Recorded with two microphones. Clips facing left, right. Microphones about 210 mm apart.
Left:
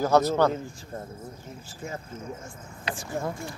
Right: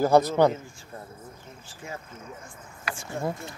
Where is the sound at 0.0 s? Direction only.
10° right (ahead or behind).